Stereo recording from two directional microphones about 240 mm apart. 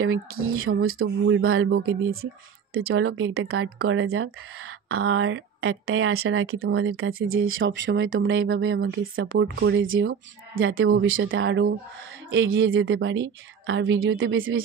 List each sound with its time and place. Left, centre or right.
0.0 s speech: right